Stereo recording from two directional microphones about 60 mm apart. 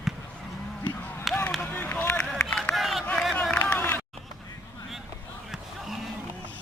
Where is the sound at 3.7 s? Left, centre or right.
Left.